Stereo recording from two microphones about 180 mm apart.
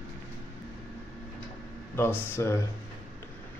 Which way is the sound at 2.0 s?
15° left (ahead or behind).